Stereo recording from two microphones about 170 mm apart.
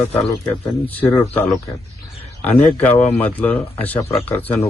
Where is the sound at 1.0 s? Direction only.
20° left (ahead or behind).